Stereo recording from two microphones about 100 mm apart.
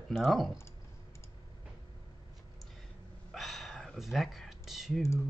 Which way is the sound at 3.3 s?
Centre (ahead or behind).